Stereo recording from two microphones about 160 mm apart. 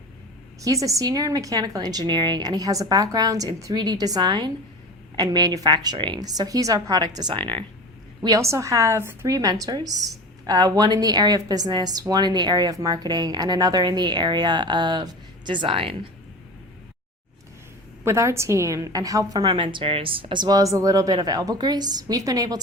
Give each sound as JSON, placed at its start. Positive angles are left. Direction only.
{"t": 0.6, "sound": "a woman's voice", "side_deg": -20}
{"t": 8.2, "sound": "a woman's voice", "side_deg": -20}
{"t": 18.0, "sound": "a woman's voice", "side_deg": -15}